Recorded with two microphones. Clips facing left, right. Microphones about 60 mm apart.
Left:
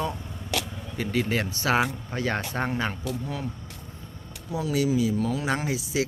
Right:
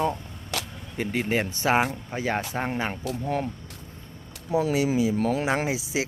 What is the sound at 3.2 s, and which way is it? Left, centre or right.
Speech, right.